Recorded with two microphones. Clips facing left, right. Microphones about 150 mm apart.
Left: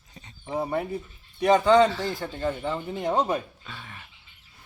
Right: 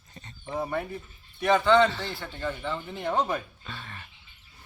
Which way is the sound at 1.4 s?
35° left (ahead or behind).